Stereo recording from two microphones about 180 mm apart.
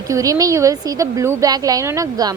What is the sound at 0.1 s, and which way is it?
Speech, 20° right (ahead or behind).